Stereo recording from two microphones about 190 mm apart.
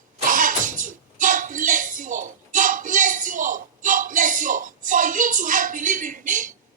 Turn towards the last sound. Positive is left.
turn(degrees=-45)  # may be behind; listen again after turning